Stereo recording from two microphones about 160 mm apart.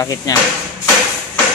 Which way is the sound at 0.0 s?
20° left (ahead or behind).